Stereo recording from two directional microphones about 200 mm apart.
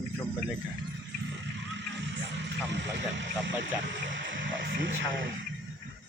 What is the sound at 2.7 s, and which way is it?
Speech, 60° right (ahead or behind).